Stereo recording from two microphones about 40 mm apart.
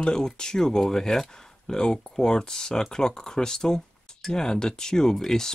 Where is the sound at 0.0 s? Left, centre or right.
Centre.